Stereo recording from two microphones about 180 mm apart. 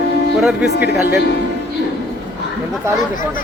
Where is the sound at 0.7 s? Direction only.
65° left (ahead or behind).